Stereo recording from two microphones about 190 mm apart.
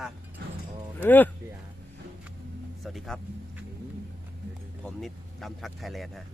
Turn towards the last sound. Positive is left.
turn(degrees=0)  # may be behind; listen again after turning